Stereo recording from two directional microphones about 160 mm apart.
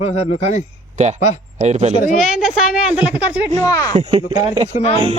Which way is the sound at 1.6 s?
45° right (ahead or behind).